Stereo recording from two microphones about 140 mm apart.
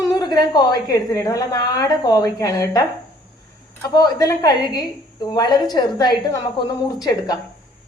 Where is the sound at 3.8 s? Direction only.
30° left (ahead or behind).